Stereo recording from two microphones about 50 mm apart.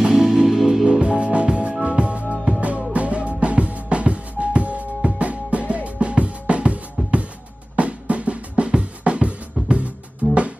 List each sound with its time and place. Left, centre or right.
0.0 s music: centre
1.0 s music: right
5.9 s drum: right